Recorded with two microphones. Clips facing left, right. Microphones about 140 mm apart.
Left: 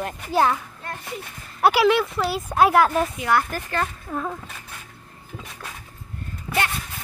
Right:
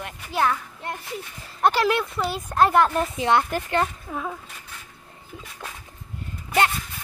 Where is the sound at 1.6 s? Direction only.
5° left (ahead or behind).